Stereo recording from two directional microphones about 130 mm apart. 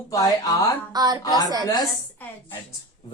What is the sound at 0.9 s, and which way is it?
Speech, 30° right (ahead or behind).